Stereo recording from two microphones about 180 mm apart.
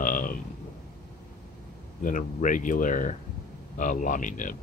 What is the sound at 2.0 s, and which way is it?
Speech, 45° left (ahead or behind).